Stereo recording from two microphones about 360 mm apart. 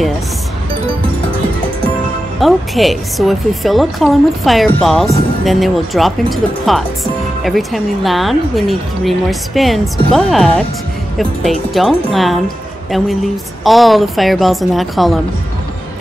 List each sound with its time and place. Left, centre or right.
2.4 s a woman's voice: centre
11.7 s a woman's voice: centre
13.7 s a woman's voice: centre